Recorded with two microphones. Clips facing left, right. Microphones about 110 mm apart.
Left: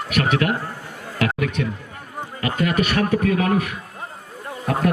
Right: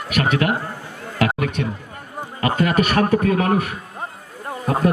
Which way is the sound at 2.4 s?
35° right (ahead or behind).